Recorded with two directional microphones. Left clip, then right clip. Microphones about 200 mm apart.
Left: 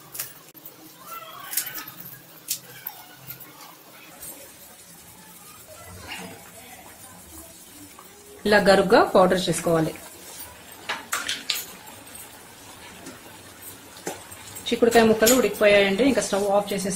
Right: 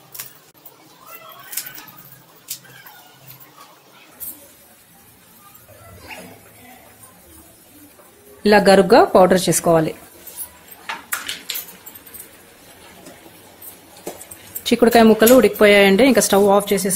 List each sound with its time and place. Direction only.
8.4 s speech: 30° right (ahead or behind)
14.7 s speech: 50° right (ahead or behind)